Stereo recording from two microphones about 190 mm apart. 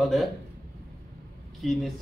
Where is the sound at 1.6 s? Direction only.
Centre (ahead or behind).